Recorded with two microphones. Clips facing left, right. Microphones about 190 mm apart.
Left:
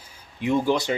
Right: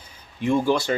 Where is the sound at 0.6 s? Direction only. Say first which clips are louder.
Right 1 dB; 15° left (ahead or behind).